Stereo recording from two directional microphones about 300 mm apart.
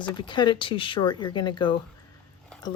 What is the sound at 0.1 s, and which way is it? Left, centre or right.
Speech, centre.